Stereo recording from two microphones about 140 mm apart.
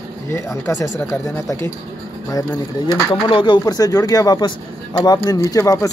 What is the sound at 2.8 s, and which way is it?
Speech, 30° left (ahead or behind).